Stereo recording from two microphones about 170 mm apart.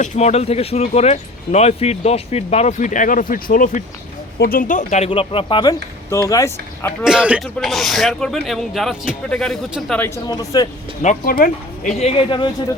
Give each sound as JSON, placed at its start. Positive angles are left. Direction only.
{"t": 0.0, "sound": "speech", "side_deg": 40}
{"t": 7.0, "sound": "speech", "side_deg": -5}
{"t": 10.2, "sound": "speech", "side_deg": 20}
{"t": 11.0, "sound": "speech", "side_deg": 55}